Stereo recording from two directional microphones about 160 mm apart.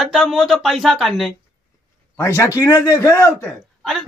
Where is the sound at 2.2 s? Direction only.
15° left (ahead or behind).